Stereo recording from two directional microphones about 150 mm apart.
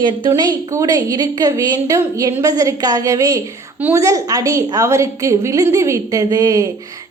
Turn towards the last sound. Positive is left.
turn(degrees=-25)  # may be behind; listen again after turning